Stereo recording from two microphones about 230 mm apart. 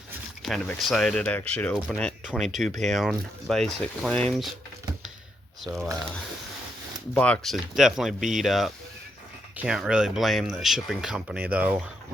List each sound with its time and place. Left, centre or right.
0.4 s speech: centre
5.6 s speech: centre
7.1 s speech: centre